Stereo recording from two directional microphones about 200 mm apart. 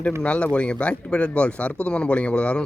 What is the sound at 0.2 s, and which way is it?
Speech, 5° left (ahead or behind).